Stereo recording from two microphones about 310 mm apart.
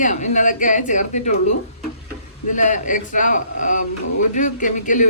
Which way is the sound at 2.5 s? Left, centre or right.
Left.